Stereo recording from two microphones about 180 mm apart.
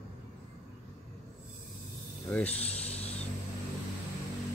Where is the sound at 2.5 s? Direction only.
35° left (ahead or behind).